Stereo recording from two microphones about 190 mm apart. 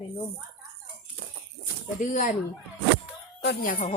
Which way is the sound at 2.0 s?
40° left (ahead or behind).